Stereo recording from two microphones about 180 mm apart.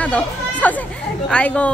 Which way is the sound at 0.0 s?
10° left (ahead or behind).